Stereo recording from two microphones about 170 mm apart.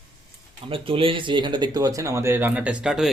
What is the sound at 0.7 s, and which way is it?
Speech, 30° right (ahead or behind).